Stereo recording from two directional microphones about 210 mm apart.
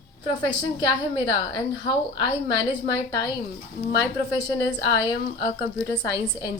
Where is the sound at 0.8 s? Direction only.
20° left (ahead or behind).